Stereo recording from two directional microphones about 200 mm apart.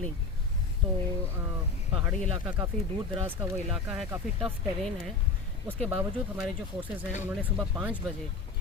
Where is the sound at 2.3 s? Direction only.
25° right (ahead or behind).